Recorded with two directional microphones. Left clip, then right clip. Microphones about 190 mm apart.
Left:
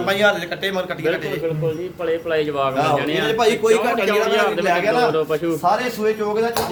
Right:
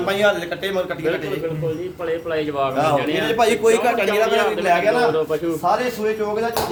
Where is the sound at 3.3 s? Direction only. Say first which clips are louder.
Even; 55° right (ahead or behind).